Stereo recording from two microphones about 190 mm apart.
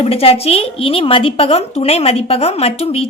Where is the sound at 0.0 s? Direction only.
30° left (ahead or behind).